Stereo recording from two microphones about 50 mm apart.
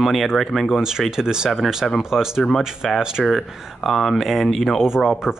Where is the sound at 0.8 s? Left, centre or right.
Centre.